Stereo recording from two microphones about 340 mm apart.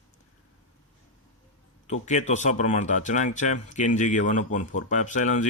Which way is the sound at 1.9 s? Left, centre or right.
Left.